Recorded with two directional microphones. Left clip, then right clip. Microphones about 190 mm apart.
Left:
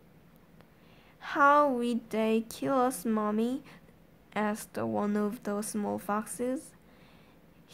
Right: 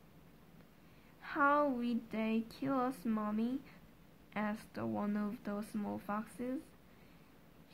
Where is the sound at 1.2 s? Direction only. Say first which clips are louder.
Left 9 dB; 30° left (ahead or behind).